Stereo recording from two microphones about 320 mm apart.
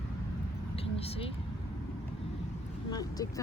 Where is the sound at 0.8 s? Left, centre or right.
Centre.